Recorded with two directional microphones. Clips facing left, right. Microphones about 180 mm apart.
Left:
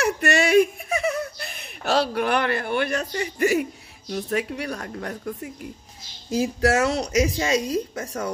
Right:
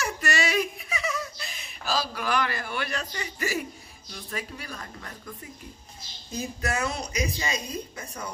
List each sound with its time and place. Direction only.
0.0 s a sound: 60° left (ahead or behind)
4.3 s speech: 65° left (ahead or behind)
6.3 s speech: 90° left